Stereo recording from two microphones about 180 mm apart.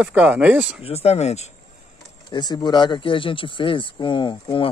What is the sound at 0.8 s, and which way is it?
Speech, 35° left (ahead or behind).